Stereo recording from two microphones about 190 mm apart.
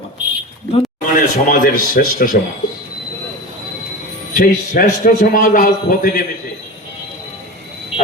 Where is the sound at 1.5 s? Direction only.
45° left (ahead or behind).